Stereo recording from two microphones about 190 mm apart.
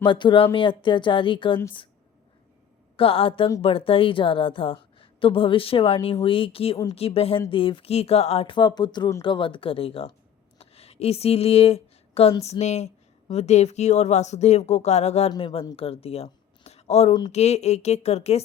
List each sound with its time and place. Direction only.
0.0 s a woman's voice: 25° left (ahead or behind)
2.9 s a woman's voice: 30° left (ahead or behind)
10.6 s a sound: 30° left (ahead or behind)
12.4 s a woman's voice: 35° left (ahead or behind)